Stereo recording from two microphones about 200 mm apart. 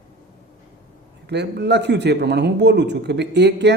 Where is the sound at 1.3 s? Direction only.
55° right (ahead or behind).